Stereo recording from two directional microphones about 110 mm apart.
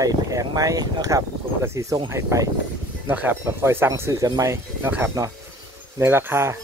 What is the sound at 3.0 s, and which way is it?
Speech, 20° right (ahead or behind).